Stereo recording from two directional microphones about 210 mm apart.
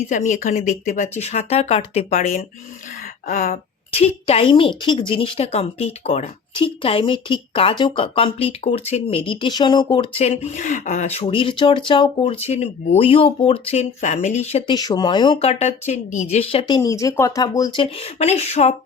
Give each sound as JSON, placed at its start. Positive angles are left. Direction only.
{"t": 0.1, "sound": "speech", "side_deg": 35}
{"t": 3.9, "sound": "speech", "side_deg": 30}